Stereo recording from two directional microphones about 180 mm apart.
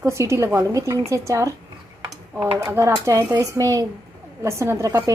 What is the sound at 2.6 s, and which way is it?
A woman's voice, 15° right (ahead or behind).